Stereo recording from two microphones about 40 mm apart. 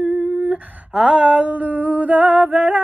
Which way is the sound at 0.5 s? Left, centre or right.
Right.